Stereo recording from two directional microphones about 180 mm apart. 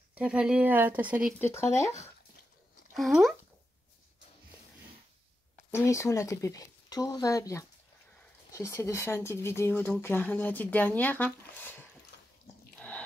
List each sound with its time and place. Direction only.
0.1 s speech: 5° right (ahead or behind)
1.4 s speech: 15° left (ahead or behind)
3.0 s speech: centre (ahead or behind)
5.7 s speech: 15° left (ahead or behind)